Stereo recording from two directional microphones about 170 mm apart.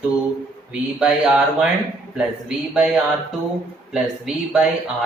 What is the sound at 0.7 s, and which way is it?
Speech, 5° right (ahead or behind).